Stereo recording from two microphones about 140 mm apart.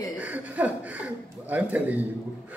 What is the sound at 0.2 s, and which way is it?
Speech, 10° right (ahead or behind).